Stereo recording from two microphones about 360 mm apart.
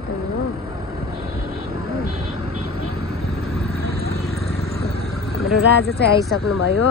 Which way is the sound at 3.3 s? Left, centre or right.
Centre.